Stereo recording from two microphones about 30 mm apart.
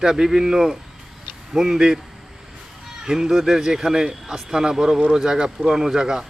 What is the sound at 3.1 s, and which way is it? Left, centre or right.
Speech, centre.